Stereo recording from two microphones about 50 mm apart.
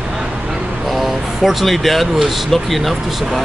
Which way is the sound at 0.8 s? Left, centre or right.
Centre.